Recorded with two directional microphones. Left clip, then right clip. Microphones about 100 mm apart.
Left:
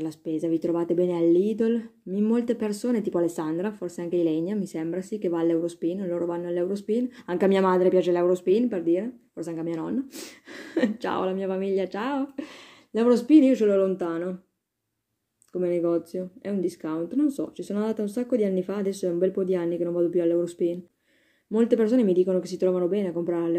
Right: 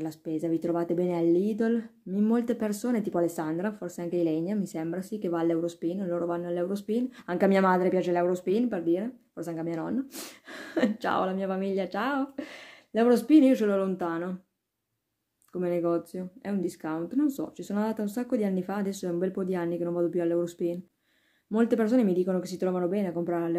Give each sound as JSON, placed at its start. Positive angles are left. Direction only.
{"t": 0.0, "sound": "speech", "side_deg": -20}
{"t": 10.1, "sound": "speech", "side_deg": -30}
{"t": 15.5, "sound": "speech", "side_deg": -25}